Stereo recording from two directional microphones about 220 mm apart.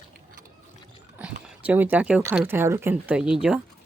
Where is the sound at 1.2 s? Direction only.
5° right (ahead or behind).